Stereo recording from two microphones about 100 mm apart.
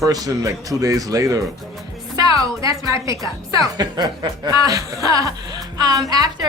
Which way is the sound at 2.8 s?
30° right (ahead or behind).